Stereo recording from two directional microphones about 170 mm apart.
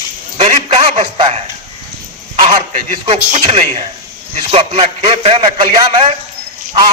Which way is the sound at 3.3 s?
40° right (ahead or behind).